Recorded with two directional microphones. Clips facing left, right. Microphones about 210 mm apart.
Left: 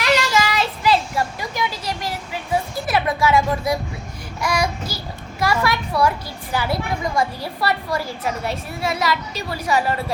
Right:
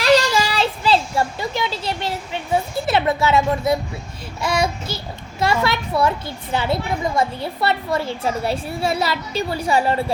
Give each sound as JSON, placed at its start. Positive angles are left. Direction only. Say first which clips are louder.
{"t": 0.0, "sound": "child singing", "louder": "right 3 dB", "side_deg": -30}
{"t": 4.4, "sound": "a woman's voice", "louder": "right 1 dB", "side_deg": -25}